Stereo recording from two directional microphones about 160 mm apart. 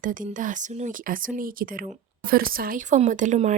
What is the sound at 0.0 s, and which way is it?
A woman's voice, 55° right (ahead or behind).